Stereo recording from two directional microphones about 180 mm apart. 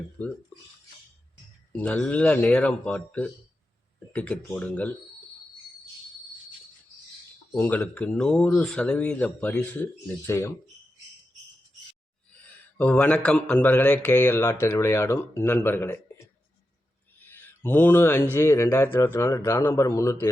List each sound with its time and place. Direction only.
0.2 s speech: 10° left (ahead or behind)
1.7 s speech: 10° left (ahead or behind)
7.5 s speech: 10° left (ahead or behind)
12.3 s speech: 10° left (ahead or behind)
17.2 s a sound: 10° left (ahead or behind)
18.3 s speech: 15° left (ahead or behind)